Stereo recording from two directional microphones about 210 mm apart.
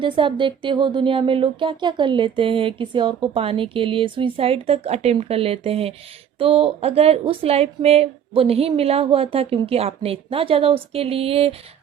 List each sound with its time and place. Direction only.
0.0 s speech: 25° right (ahead or behind)